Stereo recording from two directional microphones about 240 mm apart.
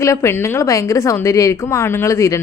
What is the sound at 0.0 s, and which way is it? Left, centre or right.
A woman's voice, centre.